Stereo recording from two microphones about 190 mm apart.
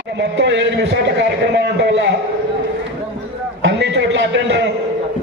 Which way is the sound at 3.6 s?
70° right (ahead or behind).